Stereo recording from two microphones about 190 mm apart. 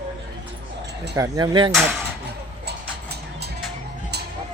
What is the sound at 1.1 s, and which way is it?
Speech, 20° right (ahead or behind).